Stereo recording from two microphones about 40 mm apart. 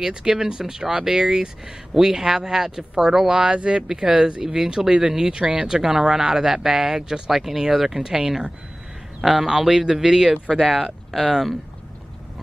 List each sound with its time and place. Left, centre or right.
0.0 s speech: centre
3.9 s speech: centre
11.1 s speech: centre